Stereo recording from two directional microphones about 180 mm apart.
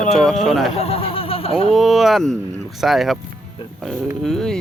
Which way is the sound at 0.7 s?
35° left (ahead or behind).